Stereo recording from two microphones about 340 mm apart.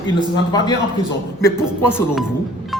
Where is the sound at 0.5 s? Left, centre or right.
Centre.